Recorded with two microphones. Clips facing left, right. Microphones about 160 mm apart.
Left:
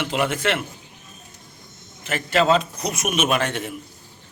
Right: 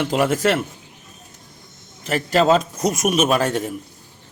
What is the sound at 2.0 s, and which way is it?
A man's voice, 40° right (ahead or behind).